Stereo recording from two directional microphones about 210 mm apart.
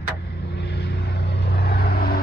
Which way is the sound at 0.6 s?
55° left (ahead or behind).